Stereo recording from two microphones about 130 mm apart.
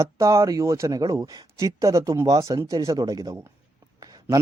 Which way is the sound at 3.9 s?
30° right (ahead or behind).